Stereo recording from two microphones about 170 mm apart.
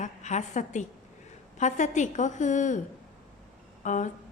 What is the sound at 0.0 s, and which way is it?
A woman's voice, 45° left (ahead or behind).